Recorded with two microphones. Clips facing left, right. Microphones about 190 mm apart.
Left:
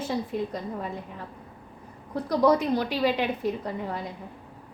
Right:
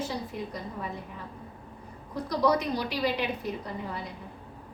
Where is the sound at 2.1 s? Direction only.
55° left (ahead or behind).